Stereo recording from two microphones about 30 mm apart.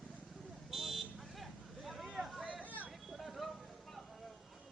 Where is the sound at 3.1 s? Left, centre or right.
Centre.